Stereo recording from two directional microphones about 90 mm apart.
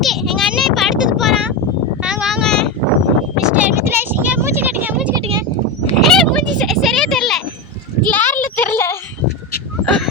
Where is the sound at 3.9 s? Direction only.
25° right (ahead or behind).